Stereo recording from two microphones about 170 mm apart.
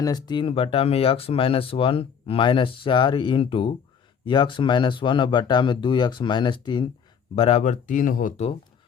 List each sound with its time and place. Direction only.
0.0 s speech: 25° left (ahead or behind); by 8.3 s 50° left (ahead or behind)